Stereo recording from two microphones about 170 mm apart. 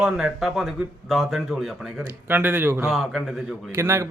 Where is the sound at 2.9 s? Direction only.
Centre (ahead or behind).